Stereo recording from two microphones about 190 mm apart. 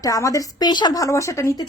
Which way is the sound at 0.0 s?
20° left (ahead or behind).